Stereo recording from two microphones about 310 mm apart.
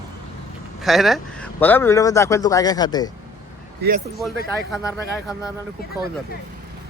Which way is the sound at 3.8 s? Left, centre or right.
Right.